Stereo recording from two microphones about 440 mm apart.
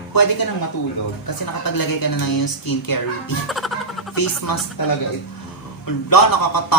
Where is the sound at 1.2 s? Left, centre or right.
Left.